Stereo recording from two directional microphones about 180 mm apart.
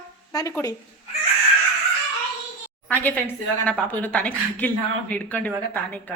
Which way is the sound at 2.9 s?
10° left (ahead or behind).